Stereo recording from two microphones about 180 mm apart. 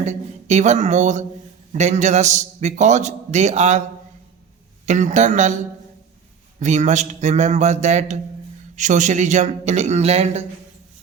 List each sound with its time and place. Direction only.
0.0 s a man's voice: 40° right (ahead or behind)
4.9 s a man's voice: 40° right (ahead or behind)
6.6 s a man's voice: 40° right (ahead or behind)